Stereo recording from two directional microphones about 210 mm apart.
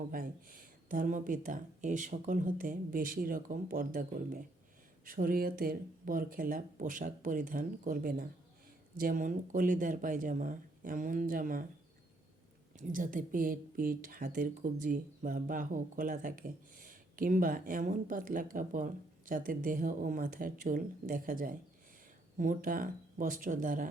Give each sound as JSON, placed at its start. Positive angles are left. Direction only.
{"t": 0.1, "sound": "speech", "side_deg": -40}
{"t": 12.7, "sound": "speech", "side_deg": -40}